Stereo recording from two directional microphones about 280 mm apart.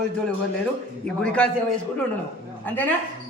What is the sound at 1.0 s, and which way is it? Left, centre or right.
Speech, centre.